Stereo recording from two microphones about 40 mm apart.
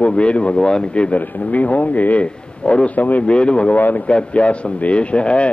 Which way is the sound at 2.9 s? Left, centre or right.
Left.